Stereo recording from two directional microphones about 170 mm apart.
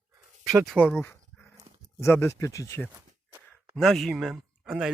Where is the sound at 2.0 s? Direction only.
15° left (ahead or behind).